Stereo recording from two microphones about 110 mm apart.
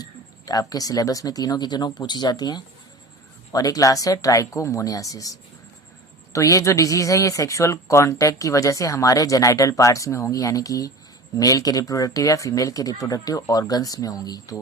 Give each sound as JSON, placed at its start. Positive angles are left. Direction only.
{"t": 0.0, "sound": "speech", "side_deg": 35}